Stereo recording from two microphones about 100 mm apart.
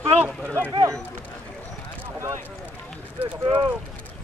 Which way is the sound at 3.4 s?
40° right (ahead or behind).